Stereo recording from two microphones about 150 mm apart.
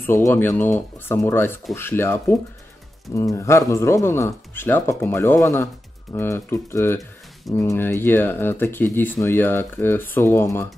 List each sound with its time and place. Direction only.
0.0 s speech: 15° left (ahead or behind)